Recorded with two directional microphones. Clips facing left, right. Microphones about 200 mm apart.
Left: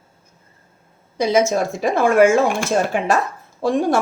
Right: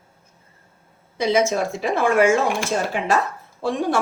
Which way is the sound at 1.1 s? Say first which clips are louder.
Left 2 dB; 45° left (ahead or behind).